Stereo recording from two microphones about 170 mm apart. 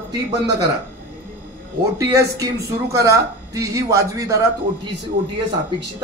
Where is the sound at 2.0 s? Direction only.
20° right (ahead or behind).